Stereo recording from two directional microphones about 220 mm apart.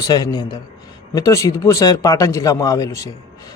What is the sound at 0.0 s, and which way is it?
A man's voice, 20° left (ahead or behind).